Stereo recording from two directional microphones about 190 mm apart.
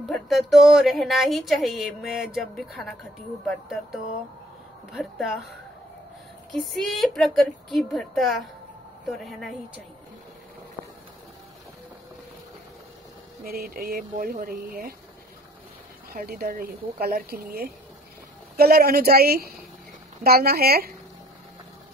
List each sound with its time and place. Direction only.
0.1 s speech: centre (ahead or behind)
6.5 s speech: centre (ahead or behind)
13.4 s speech: 55° right (ahead or behind)
16.1 s a woman's voice: 55° right (ahead or behind)